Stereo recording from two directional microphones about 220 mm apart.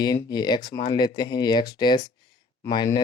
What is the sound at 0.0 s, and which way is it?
Speech, 20° left (ahead or behind).